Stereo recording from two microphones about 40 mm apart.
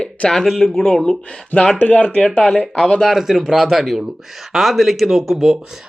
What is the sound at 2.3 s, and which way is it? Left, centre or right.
Speech, centre.